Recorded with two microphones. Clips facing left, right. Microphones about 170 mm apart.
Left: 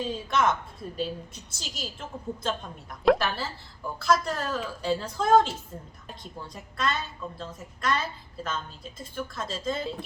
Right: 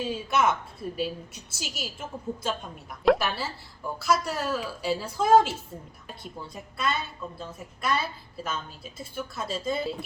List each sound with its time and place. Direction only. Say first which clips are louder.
0.0 s a woman's voice: right 1 dB; 5° right (ahead or behind)